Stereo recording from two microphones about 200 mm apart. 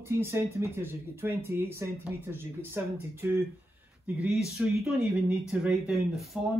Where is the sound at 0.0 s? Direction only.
10° right (ahead or behind).